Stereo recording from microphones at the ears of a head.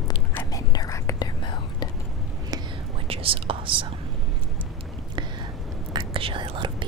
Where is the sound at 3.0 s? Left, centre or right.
Right.